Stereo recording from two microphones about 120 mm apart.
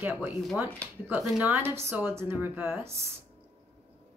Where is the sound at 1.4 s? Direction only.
15° right (ahead or behind).